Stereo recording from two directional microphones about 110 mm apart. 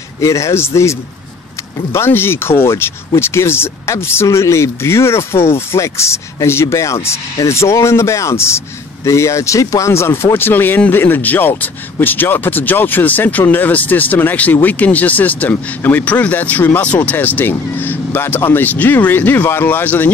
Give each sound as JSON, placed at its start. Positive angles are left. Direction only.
{"t": 0.2, "sound": "a man's voice", "side_deg": 25}